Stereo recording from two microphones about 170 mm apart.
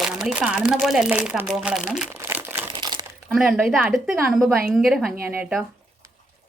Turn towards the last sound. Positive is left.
turn(degrees=-10)  # may be behind; listen again after turning